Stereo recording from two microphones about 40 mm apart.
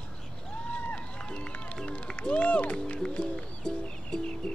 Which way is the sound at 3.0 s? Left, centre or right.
Left.